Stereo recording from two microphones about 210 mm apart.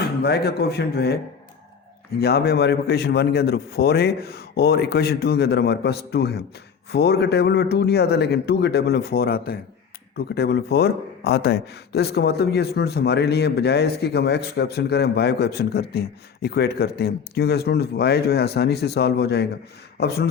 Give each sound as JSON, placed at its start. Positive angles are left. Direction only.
{"t": 0.2, "sound": "speech", "side_deg": 50}
{"t": 2.2, "sound": "speech", "side_deg": 50}